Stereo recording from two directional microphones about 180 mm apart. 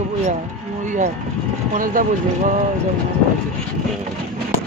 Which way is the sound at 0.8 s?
45° right (ahead or behind).